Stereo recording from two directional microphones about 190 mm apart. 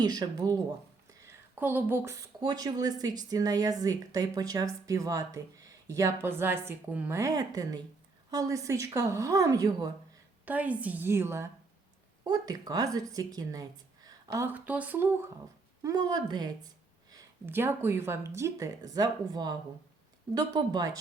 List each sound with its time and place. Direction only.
0.0 s a woman's voice: 20° right (ahead or behind)
10.4 s a woman's voice: 10° right (ahead or behind)